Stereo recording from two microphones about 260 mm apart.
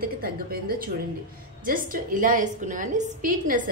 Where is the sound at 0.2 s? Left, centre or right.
Right.